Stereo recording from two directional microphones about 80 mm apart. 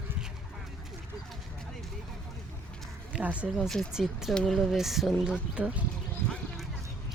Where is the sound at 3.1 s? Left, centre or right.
Centre.